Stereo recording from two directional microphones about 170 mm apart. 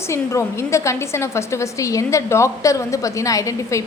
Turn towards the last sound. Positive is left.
turn(degrees=20)  # may be behind; listen again after turning